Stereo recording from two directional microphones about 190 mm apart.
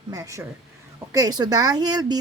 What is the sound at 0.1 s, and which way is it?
Speech, 15° right (ahead or behind).